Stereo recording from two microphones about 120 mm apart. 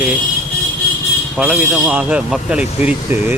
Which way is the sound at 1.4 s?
5° right (ahead or behind).